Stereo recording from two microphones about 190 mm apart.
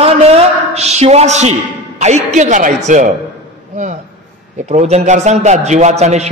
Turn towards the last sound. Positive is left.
turn(degrees=-35)  # may be behind; listen again after turning